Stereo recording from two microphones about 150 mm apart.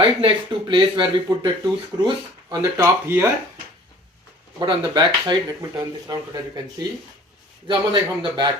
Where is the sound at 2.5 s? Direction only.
20° right (ahead or behind).